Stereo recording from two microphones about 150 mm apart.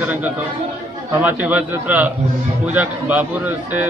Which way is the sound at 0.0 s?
10° right (ahead or behind).